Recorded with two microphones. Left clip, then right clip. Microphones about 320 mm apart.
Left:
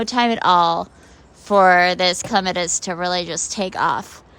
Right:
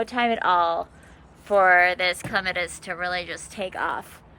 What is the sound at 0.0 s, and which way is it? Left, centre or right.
A woman's voice, centre.